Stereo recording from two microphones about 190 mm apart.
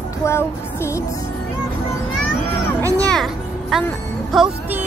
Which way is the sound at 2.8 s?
15° right (ahead or behind).